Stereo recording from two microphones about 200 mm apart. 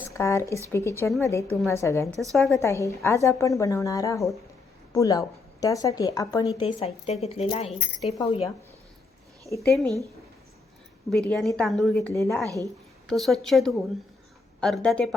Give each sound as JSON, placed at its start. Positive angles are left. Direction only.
{"t": 0.1, "sound": "a woman's voice", "side_deg": 15}
{"t": 2.3, "sound": "a woman's voice", "side_deg": 0}
{"t": 2.6, "sound": "a woman's voice", "side_deg": 15}
{"t": 9.6, "sound": "a woman's voice", "side_deg": 0}
{"t": 11.3, "sound": "a woman's voice", "side_deg": 5}
{"t": 11.9, "sound": "a woman's voice", "side_deg": 15}
{"t": 13.1, "sound": "a woman's voice", "side_deg": 0}